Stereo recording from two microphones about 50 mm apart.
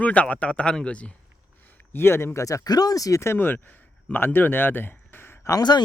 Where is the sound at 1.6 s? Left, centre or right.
Left.